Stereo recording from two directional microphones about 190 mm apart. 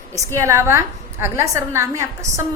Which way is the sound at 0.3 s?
15° right (ahead or behind).